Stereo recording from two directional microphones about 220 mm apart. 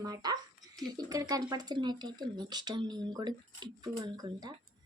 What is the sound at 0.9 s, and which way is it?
A child's voice, 15° right (ahead or behind).